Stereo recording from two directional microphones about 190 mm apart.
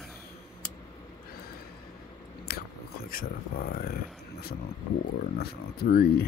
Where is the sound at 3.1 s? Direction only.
50° left (ahead or behind).